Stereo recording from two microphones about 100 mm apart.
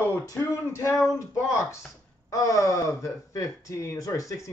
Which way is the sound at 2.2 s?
35° left (ahead or behind).